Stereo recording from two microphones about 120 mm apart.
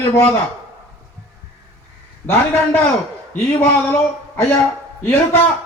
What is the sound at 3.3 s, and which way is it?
A man's voice, 15° left (ahead or behind).